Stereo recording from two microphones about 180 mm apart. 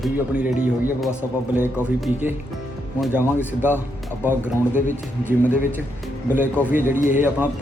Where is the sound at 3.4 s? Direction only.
10° left (ahead or behind).